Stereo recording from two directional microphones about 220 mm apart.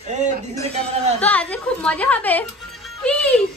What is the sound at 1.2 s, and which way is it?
A woman's voice, 5° left (ahead or behind).